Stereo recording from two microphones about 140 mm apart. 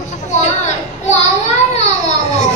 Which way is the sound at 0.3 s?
55° left (ahead or behind).